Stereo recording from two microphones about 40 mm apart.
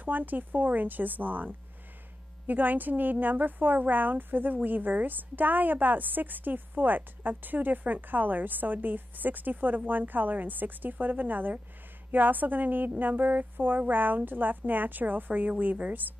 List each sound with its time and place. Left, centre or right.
0.0 s a woman's voice: right